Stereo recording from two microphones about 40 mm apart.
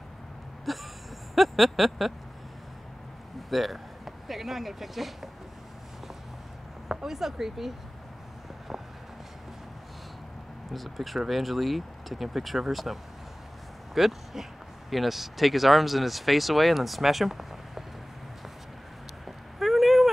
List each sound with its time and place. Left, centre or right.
0.7 s speech: centre
3.4 s speech: centre
6.9 s speech: centre
10.7 s speech: centre
19.2 s a sound: centre